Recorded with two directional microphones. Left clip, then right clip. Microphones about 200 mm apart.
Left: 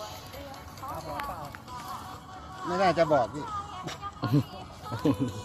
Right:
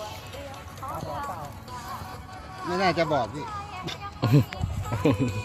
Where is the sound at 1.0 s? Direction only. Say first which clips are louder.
Right 2 dB; 35° right (ahead or behind).